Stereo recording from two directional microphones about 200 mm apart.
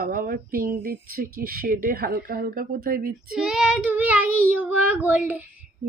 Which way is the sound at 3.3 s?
5° right (ahead or behind).